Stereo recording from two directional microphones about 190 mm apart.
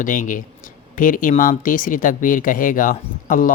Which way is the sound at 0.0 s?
45° left (ahead or behind).